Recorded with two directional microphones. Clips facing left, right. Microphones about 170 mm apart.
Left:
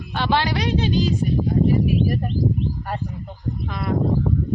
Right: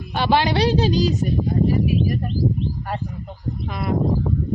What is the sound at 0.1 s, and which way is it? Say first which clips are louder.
Speech: right 3 dB; 15° right (ahead or behind).